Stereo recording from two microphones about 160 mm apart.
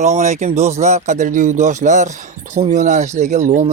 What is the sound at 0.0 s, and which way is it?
Speech, 45° right (ahead or behind).